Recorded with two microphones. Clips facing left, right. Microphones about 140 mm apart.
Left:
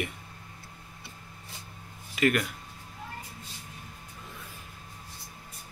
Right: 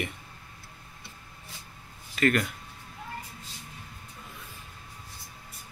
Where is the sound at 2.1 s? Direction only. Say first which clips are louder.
Right 1 dB; 10° left (ahead or behind).